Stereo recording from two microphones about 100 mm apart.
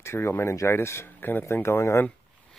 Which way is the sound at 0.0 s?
25° left (ahead or behind).